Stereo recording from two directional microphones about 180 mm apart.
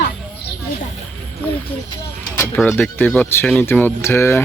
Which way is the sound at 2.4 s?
10° left (ahead or behind).